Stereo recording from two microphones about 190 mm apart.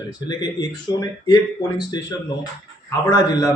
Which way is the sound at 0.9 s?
20° left (ahead or behind).